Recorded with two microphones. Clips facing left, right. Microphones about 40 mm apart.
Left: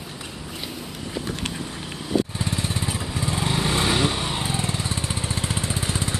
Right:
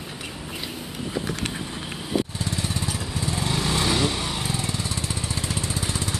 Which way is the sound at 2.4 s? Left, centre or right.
Left.